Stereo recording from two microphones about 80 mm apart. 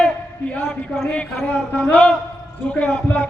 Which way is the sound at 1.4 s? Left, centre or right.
Centre.